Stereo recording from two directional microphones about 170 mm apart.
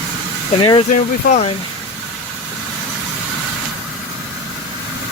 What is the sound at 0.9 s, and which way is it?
Speech, 45° left (ahead or behind).